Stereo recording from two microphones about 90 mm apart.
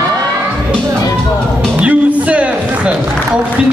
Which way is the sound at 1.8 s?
15° right (ahead or behind).